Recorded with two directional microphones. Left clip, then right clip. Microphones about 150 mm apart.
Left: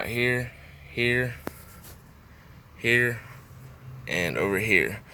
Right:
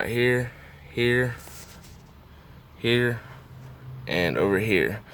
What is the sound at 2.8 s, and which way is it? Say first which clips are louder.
Speech: left 1 dB; 25° right (ahead or behind).